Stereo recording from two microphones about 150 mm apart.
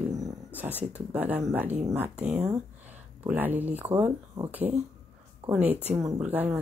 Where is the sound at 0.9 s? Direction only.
10° right (ahead or behind).